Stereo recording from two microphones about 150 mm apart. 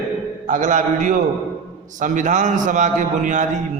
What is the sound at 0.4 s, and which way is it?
A man's voice, 60° right (ahead or behind).